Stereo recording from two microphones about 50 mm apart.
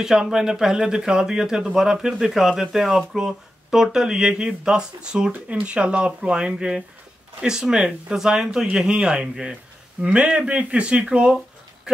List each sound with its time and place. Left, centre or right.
0.0 s speech: centre
10.0 s a man's voice: right